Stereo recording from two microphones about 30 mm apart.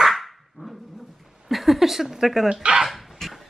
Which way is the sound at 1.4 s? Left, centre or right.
Centre.